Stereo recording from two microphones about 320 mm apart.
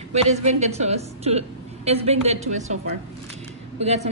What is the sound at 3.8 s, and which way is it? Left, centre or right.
Speech, centre.